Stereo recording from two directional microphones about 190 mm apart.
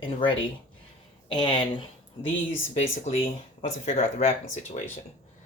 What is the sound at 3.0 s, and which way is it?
Speech, 35° left (ahead or behind).